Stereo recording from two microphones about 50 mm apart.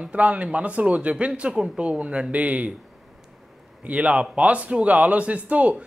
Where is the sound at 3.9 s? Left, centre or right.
Right.